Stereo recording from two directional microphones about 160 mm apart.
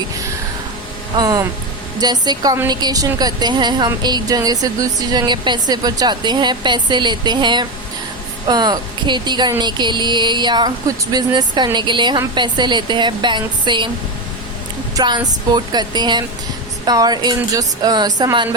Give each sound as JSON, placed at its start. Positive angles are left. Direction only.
{"t": 1.1, "sound": "speech", "side_deg": -25}
{"t": 14.9, "sound": "speech", "side_deg": -25}